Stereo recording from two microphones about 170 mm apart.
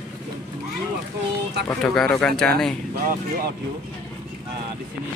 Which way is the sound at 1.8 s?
5° left (ahead or behind).